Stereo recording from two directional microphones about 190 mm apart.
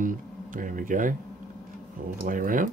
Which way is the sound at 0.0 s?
45° right (ahead or behind).